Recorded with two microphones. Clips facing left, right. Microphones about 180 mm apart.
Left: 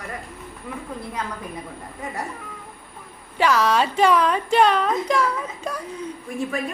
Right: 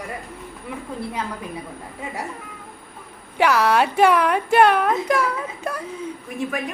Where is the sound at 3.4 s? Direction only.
10° right (ahead or behind).